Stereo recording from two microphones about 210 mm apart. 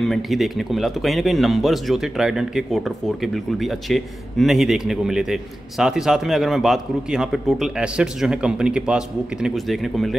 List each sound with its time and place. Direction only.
0.0 s speech: centre (ahead or behind)